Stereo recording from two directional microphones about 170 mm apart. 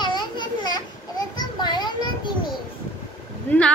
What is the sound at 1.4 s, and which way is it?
Children playing, 25° left (ahead or behind).